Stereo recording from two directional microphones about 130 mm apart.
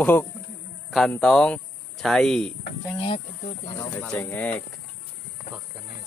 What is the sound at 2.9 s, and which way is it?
Speech, 40° left (ahead or behind).